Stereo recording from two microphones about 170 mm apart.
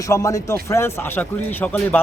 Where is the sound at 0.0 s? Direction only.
20° left (ahead or behind).